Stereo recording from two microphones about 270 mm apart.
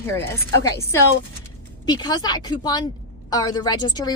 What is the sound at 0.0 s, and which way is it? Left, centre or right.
A woman's voice, centre.